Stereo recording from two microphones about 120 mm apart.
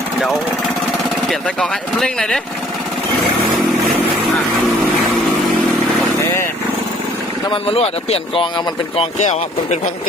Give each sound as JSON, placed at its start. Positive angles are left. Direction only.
{"t": 1.3, "sound": "speech", "side_deg": 5}
{"t": 7.5, "sound": "speech", "side_deg": 50}
{"t": 9.1, "sound": "speech", "side_deg": 90}